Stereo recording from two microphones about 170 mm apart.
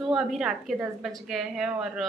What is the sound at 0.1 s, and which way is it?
A woman's voice, centre (ahead or behind).